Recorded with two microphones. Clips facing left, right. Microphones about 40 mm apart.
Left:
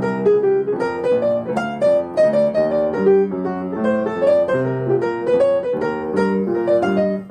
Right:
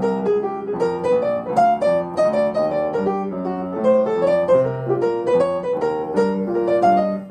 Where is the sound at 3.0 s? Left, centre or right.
Left.